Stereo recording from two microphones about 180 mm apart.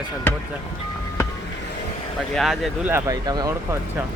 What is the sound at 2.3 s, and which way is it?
Speech, centre (ahead or behind).